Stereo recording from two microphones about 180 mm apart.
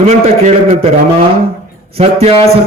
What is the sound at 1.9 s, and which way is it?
Speech, 35° right (ahead or behind).